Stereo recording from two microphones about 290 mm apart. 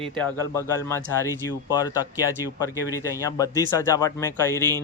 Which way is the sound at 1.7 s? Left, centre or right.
Centre.